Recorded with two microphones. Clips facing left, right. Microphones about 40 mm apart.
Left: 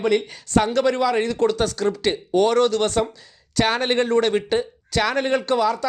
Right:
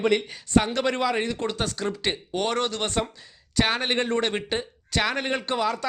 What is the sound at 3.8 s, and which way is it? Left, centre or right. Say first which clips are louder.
Speech: left 5 dB; centre.